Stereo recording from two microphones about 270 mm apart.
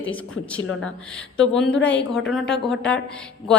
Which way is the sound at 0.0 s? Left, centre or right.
Centre.